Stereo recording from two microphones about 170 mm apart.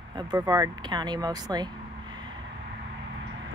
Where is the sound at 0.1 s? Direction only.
25° right (ahead or behind).